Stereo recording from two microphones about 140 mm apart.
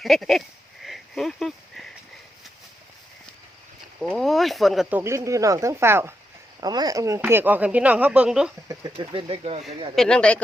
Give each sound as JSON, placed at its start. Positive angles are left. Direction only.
{"t": 0.0, "sound": "a sound", "side_deg": 0}
{"t": 4.1, "sound": "speech", "side_deg": 0}
{"t": 4.9, "sound": "speech", "side_deg": -15}
{"t": 6.6, "sound": "speech", "side_deg": -30}
{"t": 8.6, "sound": "speech", "side_deg": -25}
{"t": 9.0, "sound": "speech", "side_deg": -40}
{"t": 9.9, "sound": "speech", "side_deg": 5}